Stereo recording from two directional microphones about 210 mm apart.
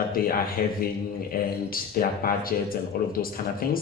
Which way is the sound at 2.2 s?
45° left (ahead or behind).